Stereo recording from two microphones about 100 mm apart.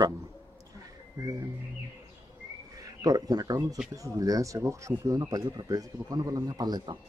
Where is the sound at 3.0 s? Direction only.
40° right (ahead or behind).